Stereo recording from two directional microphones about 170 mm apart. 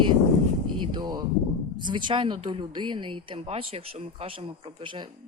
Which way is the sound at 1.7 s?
25° right (ahead or behind).